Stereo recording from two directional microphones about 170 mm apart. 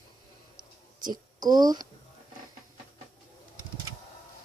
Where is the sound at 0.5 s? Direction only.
25° right (ahead or behind).